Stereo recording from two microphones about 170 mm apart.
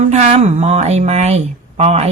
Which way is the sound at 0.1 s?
40° right (ahead or behind).